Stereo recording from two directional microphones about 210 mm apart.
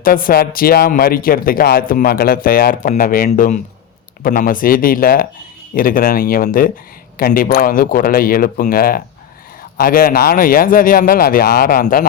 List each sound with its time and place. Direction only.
0.0 s speech: 40° left (ahead or behind)